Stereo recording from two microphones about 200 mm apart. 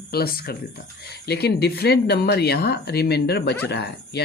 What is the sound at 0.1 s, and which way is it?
Speech, 50° left (ahead or behind).